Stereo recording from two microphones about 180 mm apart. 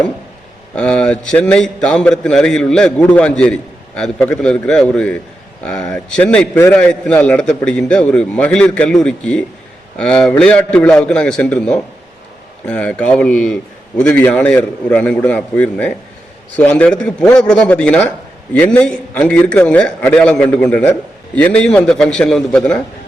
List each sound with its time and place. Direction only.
0.8 s a man's voice: 5° left (ahead or behind)